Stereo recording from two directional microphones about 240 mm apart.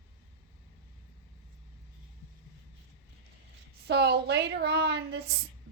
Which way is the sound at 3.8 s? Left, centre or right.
Right.